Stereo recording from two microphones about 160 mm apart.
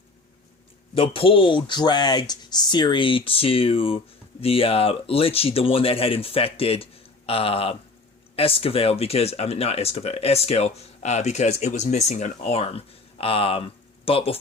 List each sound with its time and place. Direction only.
0.9 s speech: 35° left (ahead or behind)